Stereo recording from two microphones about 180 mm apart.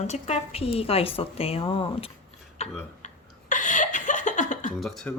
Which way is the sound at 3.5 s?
45° left (ahead or behind).